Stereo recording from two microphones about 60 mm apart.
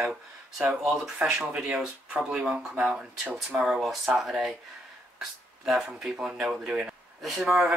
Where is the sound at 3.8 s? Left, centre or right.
Centre.